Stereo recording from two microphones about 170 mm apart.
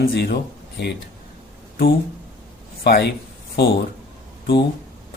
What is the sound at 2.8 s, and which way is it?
Speech, 65° left (ahead or behind).